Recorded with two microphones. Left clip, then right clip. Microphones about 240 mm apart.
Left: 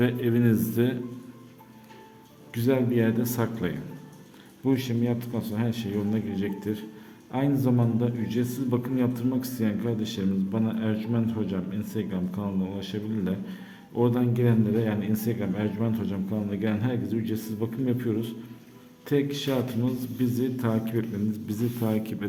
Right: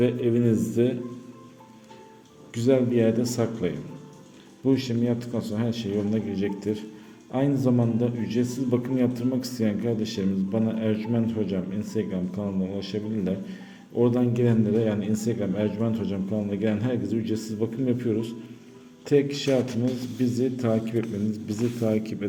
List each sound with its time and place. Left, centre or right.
0.0 s a man's voice: centre
2.5 s a man's voice: centre